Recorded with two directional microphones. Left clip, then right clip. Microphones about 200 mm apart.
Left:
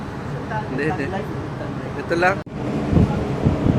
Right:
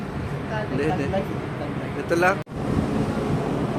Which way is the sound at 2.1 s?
5° right (ahead or behind).